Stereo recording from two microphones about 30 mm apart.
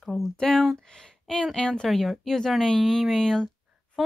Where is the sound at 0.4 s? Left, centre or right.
Centre.